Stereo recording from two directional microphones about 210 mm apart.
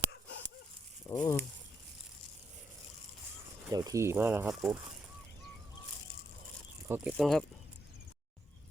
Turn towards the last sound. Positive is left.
turn(degrees=0)  # may be behind; listen again after turning